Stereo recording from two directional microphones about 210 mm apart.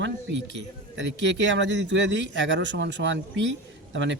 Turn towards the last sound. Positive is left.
turn(degrees=-60)  # may be behind; listen again after turning